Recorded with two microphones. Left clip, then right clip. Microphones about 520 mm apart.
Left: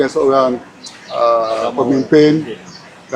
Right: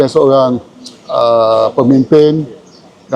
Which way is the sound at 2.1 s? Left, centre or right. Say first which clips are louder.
Right 1 dB; right.